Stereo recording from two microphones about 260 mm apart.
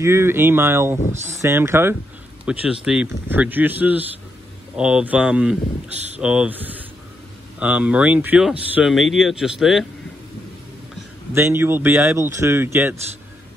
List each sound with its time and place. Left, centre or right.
0.0 s speech: centre
5.9 s speech: right
6.2 s speech: centre
11.3 s speech: centre